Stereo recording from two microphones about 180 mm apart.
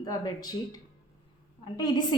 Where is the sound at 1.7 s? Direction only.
25° left (ahead or behind).